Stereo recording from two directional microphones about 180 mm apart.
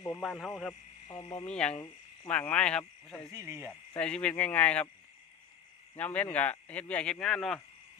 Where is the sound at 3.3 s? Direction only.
15° right (ahead or behind).